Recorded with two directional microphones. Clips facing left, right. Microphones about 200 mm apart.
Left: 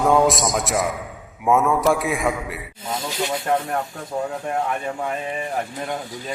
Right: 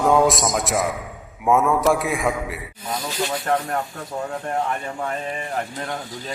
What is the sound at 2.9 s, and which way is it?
Snake, 25° left (ahead or behind).